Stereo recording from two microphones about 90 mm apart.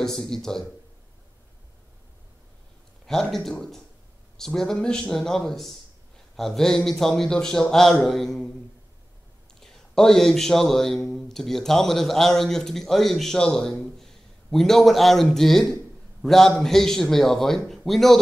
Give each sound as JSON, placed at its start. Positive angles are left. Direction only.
{"t": 0.0, "sound": "a man's voice", "side_deg": 5}
{"t": 3.1, "sound": "a man's voice", "side_deg": 5}
{"t": 9.6, "sound": "a man's voice", "side_deg": 5}